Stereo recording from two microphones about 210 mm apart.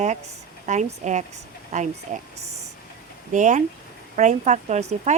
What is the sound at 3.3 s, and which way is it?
Speech, 35° right (ahead or behind).